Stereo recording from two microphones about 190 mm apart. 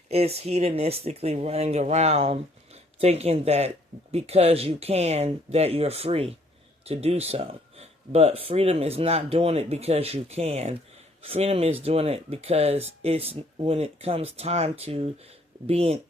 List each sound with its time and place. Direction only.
0.1 s speech: 30° right (ahead or behind)